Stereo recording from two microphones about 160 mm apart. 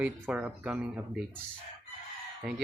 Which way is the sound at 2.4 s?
5° right (ahead or behind).